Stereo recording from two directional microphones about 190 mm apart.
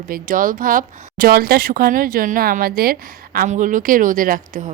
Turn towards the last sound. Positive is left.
turn(degrees=-45)  # may be behind; listen again after turning